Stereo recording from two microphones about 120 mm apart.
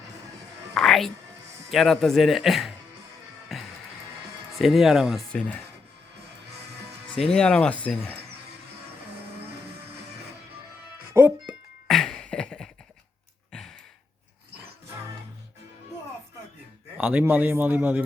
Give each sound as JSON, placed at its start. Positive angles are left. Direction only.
{"t": 0.7, "sound": "music", "side_deg": 5}
{"t": 1.7, "sound": "speech", "side_deg": 5}
{"t": 3.5, "sound": "music", "side_deg": 0}
{"t": 4.5, "sound": "speech", "side_deg": 0}
{"t": 7.2, "sound": "speech", "side_deg": 5}
{"t": 11.1, "sound": "music", "side_deg": -20}
{"t": 11.9, "sound": "beatboxing", "side_deg": 5}
{"t": 13.5, "sound": "sigh", "side_deg": 5}
{"t": 17.0, "sound": "speech", "side_deg": -15}